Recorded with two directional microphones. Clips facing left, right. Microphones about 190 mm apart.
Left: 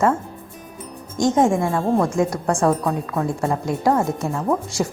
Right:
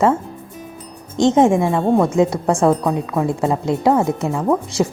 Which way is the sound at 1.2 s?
25° right (ahead or behind).